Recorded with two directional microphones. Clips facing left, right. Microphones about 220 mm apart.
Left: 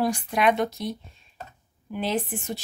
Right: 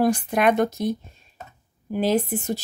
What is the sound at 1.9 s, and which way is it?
Speech, 40° right (ahead or behind).